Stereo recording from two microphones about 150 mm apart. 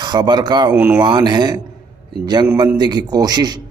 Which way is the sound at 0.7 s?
10° right (ahead or behind).